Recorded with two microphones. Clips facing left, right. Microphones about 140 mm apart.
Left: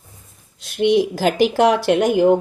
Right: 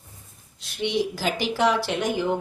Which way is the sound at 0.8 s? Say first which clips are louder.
Left 9 dB; 55° left (ahead or behind).